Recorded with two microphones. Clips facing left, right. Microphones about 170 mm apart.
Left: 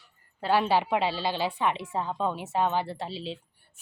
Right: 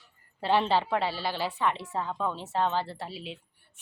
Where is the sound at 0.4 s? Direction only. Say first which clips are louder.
Left 1 dB; 5° left (ahead or behind).